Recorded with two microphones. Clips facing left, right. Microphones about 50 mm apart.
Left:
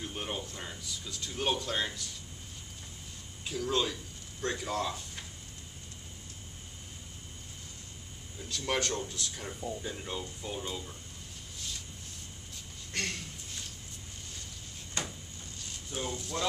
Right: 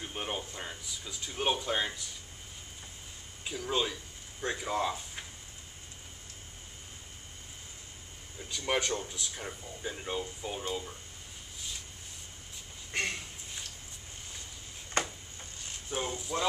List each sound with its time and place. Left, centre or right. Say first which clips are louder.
0.0 s speech: right 1 dB; centre
3.4 s speech: left 1 dB; centre
8.5 s speech: right 1 dB; centre
12.9 s a sound: right 3 dB; centre
15.0 s a sound: right 6 dB; right
15.9 s speech: right 2 dB; right
16.2 s speech: right 2 dB; centre